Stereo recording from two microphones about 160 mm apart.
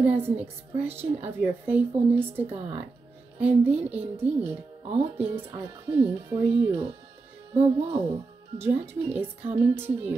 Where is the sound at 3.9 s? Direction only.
10° right (ahead or behind).